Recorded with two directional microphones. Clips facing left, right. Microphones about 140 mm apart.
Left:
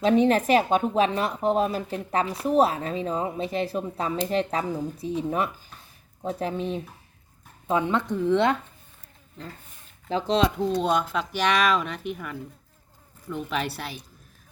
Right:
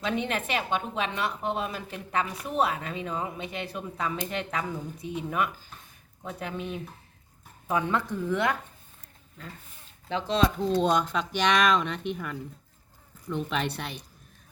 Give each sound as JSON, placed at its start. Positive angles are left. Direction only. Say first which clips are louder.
{"t": 0.0, "sound": "a woman's voice", "louder": "left 10 dB", "side_deg": 35}
{"t": 10.1, "sound": "a woman's voice", "louder": "left 3 dB", "side_deg": 35}
{"t": 10.8, "sound": "speech", "louder": "right 2 dB", "side_deg": 5}